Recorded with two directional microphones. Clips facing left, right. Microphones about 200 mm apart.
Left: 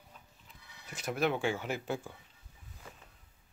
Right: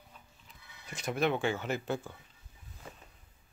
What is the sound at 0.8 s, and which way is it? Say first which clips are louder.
Speech: right 1 dB; 5° left (ahead or behind).